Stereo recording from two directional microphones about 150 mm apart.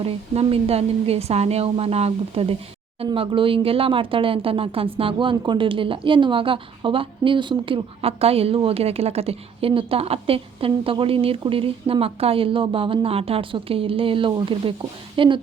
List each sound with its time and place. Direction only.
0.0 s a woman's voice: 40° right (ahead or behind)